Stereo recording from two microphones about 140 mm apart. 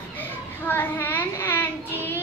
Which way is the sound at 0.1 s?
15° left (ahead or behind).